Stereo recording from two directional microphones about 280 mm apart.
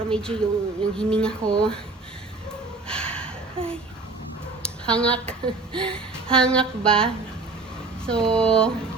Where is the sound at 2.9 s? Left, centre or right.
Centre.